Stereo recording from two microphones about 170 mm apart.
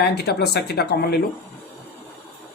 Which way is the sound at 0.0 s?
75° left (ahead or behind).